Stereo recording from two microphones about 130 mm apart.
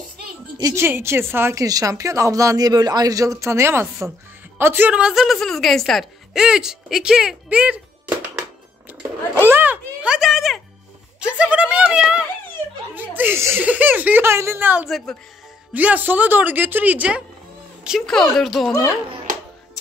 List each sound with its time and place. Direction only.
0.6 s a woman's voice: 20° right (ahead or behind)
8.4 s a sound: 10° right (ahead or behind)
12.9 s speech: 15° right (ahead or behind)
14.9 s a woman's voice: centre (ahead or behind)
15.7 s speech: 10° right (ahead or behind)
17.8 s a woman's voice: centre (ahead or behind)